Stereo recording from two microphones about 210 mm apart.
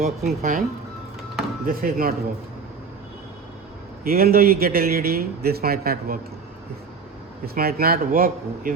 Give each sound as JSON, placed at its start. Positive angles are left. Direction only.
{"t": 0.0, "sound": "speech", "side_deg": -35}
{"t": 1.6, "sound": "a man's voice", "side_deg": -45}
{"t": 4.0, "sound": "a man's voice", "side_deg": -45}
{"t": 7.4, "sound": "a man's voice", "side_deg": -45}